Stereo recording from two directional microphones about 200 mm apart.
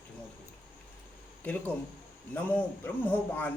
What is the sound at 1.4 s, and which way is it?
Speech, 10° left (ahead or behind).